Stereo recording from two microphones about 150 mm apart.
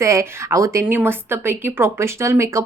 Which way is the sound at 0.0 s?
20° right (ahead or behind).